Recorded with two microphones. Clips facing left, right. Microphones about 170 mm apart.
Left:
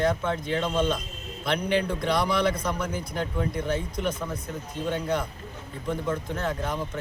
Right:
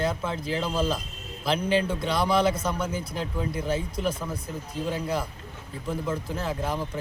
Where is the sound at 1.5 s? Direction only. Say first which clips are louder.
Right 1 dB; 30° right (ahead or behind).